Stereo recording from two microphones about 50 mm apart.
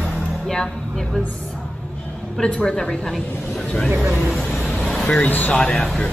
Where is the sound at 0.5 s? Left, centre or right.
Centre.